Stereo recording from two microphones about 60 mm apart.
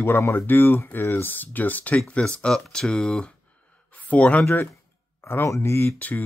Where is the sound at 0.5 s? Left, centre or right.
Left.